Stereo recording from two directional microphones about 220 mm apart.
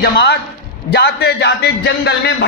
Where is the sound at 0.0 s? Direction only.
50° left (ahead or behind).